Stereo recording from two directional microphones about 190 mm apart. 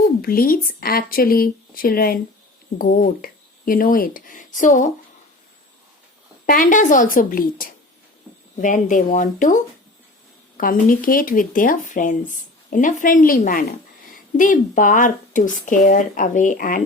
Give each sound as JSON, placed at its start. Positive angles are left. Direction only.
{"t": 0.2, "sound": "speech", "side_deg": 50}
{"t": 6.4, "sound": "speech", "side_deg": 45}
{"t": 10.6, "sound": "speech", "side_deg": 45}